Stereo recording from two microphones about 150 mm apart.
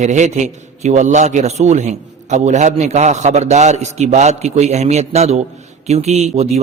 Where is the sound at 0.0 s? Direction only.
50° right (ahead or behind).